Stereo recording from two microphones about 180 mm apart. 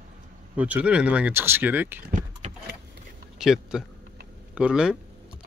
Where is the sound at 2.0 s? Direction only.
50° right (ahead or behind).